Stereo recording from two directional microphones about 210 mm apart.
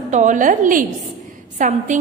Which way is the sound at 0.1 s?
35° right (ahead or behind).